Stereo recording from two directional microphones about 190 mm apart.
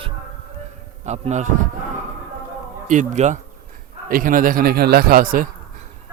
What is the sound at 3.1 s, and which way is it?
A man's voice, 40° right (ahead or behind).